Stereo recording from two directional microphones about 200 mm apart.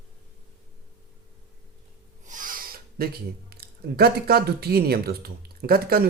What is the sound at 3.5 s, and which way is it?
Speech, 50° right (ahead or behind).